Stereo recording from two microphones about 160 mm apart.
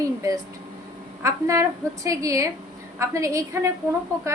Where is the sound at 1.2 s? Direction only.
20° right (ahead or behind).